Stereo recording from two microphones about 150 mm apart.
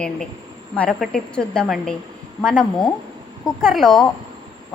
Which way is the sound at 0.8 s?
5° left (ahead or behind).